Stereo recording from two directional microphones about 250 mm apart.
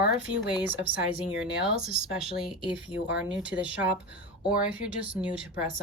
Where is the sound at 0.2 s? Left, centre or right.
Centre.